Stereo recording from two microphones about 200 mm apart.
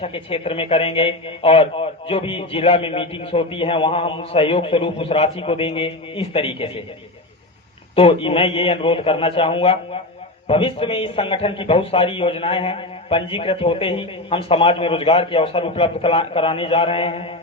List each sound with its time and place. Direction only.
0.0 s a man's voice: 25° left (ahead or behind)
7.9 s a man's voice: 30° left (ahead or behind)